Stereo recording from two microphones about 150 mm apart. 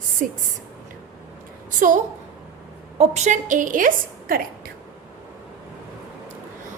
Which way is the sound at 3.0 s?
50° right (ahead or behind).